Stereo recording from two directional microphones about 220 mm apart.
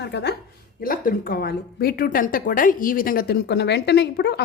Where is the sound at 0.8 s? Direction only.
40° left (ahead or behind).